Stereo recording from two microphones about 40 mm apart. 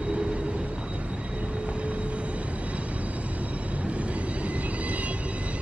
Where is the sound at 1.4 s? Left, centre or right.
Right.